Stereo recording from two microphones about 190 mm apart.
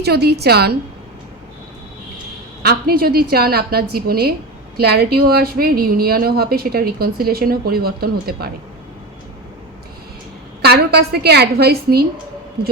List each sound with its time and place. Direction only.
0.0 s a woman's voice: 55° right (ahead or behind)
2.6 s a woman's voice: 50° right (ahead or behind)
10.6 s a woman's voice: 60° right (ahead or behind)